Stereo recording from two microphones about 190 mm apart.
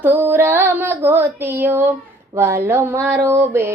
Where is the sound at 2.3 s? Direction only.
15° right (ahead or behind).